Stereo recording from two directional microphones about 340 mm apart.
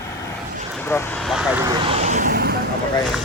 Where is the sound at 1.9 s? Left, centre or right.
Right.